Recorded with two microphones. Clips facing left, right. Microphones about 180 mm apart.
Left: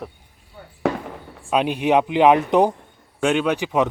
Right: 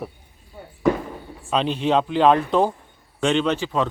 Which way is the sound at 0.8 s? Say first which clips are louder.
Right 3 dB; 75° left (ahead or behind).